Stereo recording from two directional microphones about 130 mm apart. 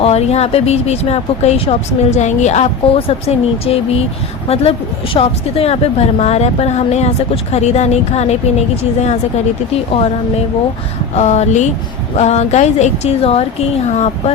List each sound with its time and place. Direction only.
0.0 s a woman's voice: 50° left (ahead or behind)
11.1 s a woman's voice: 60° left (ahead or behind)